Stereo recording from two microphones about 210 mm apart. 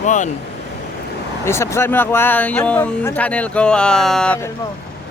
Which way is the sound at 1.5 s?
15° left (ahead or behind).